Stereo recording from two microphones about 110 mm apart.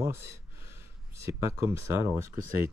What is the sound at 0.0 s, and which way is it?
Speech, 25° right (ahead or behind).